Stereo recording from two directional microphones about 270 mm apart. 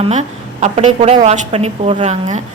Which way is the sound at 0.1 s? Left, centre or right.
Right.